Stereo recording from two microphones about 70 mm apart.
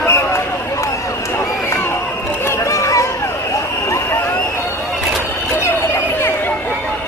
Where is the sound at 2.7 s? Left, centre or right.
Left.